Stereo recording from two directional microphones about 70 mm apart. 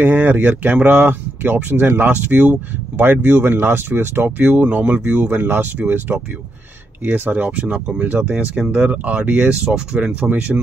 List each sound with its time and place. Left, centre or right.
0.0 s speech: right
4.4 s speech: right